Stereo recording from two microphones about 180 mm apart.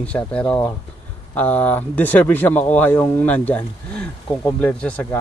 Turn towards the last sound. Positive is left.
turn(degrees=5)  # may be behind; listen again after turning